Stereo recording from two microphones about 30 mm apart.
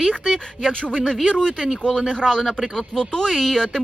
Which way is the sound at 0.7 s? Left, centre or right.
Left.